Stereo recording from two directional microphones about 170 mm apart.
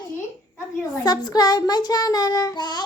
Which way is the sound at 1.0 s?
20° left (ahead or behind).